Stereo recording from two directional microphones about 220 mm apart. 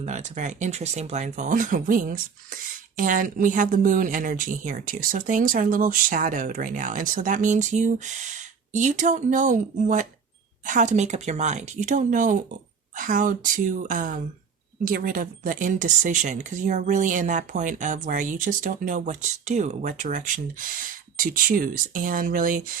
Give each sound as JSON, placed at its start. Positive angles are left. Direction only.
{"t": 0.0, "sound": "a woman's voice", "side_deg": -35}